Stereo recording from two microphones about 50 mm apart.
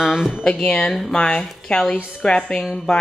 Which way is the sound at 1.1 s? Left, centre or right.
Centre.